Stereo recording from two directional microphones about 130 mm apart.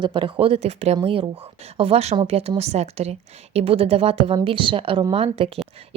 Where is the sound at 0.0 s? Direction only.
40° right (ahead or behind).